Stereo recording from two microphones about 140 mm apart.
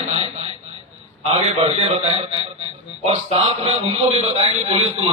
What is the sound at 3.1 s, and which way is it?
A man's voice, 50° right (ahead or behind).